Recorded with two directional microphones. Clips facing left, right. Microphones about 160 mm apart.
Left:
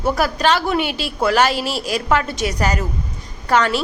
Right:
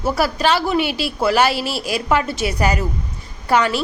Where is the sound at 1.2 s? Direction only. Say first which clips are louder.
Even; 10° right (ahead or behind).